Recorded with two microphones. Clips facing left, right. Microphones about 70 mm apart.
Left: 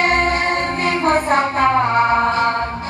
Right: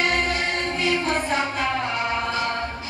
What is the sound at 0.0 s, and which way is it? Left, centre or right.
Music, left.